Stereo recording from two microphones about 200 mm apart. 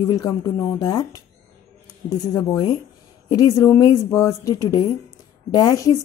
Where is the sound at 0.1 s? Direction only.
20° left (ahead or behind).